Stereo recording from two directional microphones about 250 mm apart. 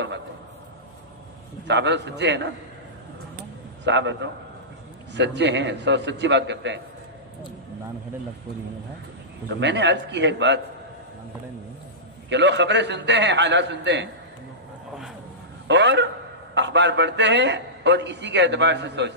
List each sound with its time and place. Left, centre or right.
1.7 s a man's voice: right
3.8 s a man's voice: right
9.6 s a man's voice: right
12.3 s a man's voice: right
15.7 s a man's voice: right